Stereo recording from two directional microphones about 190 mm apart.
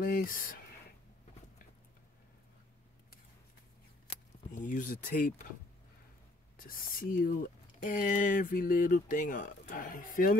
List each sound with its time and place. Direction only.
0.0 s speech: 45° left (ahead or behind)
4.5 s speech: 45° left (ahead or behind)
6.5 s speech: 45° left (ahead or behind)